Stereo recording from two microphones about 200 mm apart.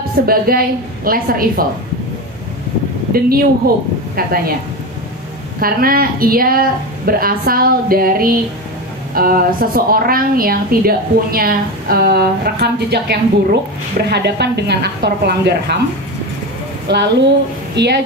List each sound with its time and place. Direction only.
0.3 s a woman's voice: 50° right (ahead or behind)
3.1 s a woman's voice: 50° right (ahead or behind)
5.6 s a woman's voice: 45° right (ahead or behind)
16.8 s a woman's voice: 60° right (ahead or behind)